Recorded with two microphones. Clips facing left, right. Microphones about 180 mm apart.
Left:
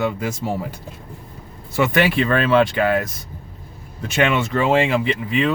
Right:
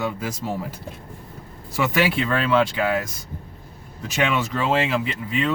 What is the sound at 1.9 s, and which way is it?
Speech, 60° left (ahead or behind).